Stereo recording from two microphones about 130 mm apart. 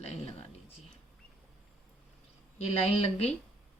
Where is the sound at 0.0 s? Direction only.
55° left (ahead or behind).